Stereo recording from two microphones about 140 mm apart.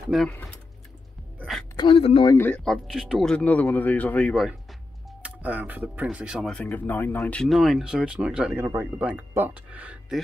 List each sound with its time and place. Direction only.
0.1 s speech: centre (ahead or behind)
1.8 s speech: 40° left (ahead or behind)
2.2 s speech: 15° left (ahead or behind)
2.6 s speech: centre (ahead or behind)
5.2 s speech: 10° right (ahead or behind)
6.5 s speech: 15° left (ahead or behind); by 10.2 s 5° right (ahead or behind)